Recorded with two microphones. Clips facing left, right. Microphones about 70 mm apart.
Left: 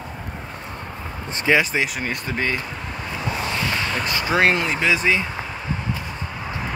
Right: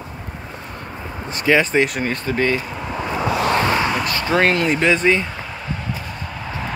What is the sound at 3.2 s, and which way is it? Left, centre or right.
Vehicle, right.